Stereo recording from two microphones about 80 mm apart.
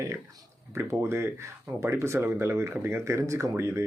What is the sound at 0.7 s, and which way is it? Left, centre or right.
Speech, right.